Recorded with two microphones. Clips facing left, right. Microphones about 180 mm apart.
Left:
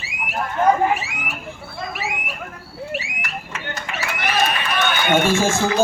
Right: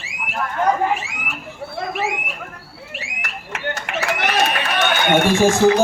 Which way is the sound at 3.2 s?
65° right (ahead or behind).